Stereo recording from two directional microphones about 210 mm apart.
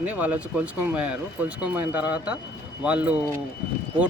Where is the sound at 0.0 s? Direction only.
5° right (ahead or behind).